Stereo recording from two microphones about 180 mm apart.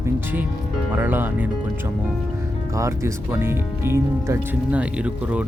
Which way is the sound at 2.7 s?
15° right (ahead or behind).